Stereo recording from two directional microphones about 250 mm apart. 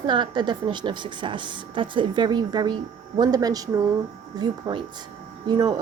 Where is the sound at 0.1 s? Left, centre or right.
Centre.